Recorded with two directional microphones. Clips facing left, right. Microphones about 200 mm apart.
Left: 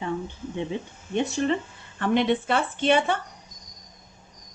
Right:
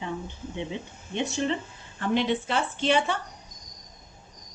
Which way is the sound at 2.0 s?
60° left (ahead or behind).